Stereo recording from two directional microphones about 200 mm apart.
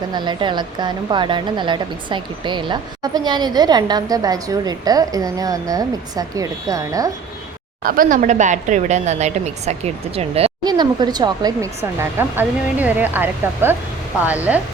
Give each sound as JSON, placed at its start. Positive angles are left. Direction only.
{"t": 0.1, "sound": "a woman's voice", "side_deg": -20}
{"t": 7.9, "sound": "a woman's voice", "side_deg": -45}